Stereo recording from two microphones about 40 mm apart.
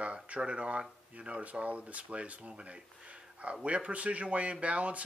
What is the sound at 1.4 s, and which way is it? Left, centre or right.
Speech, right.